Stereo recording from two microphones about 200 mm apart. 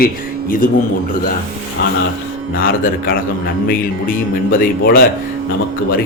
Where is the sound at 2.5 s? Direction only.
45° left (ahead or behind).